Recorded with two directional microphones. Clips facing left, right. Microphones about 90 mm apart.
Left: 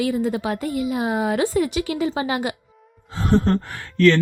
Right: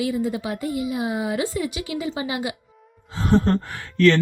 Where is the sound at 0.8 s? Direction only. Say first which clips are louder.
Left 3 dB; 55° left (ahead or behind).